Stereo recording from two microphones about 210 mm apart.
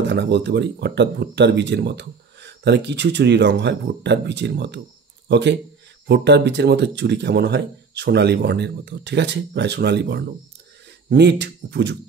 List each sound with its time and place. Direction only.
0.0 s speech: 55° right (ahead or behind)